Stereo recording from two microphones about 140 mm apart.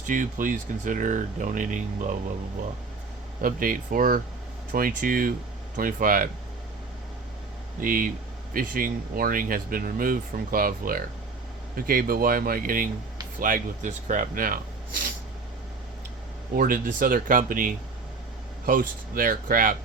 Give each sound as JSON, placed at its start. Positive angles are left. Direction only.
{"t": 0.0, "sound": "speech", "side_deg": -70}
{"t": 3.4, "sound": "speech", "side_deg": -80}
{"t": 7.8, "sound": "speech", "side_deg": -80}
{"t": 8.5, "sound": "speech", "side_deg": -90}
{"t": 13.4, "sound": "speech", "side_deg": -70}
{"t": 16.6, "sound": "speech", "side_deg": -80}